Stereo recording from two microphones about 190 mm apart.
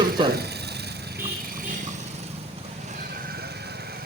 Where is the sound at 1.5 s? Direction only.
45° right (ahead or behind).